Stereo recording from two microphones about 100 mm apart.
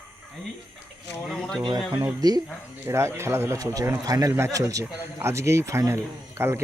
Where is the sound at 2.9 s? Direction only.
25° right (ahead or behind).